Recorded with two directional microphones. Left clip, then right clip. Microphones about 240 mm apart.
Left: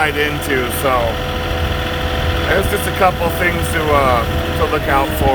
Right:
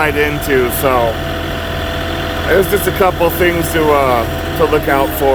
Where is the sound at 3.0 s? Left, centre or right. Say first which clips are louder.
Right 1 dB; right.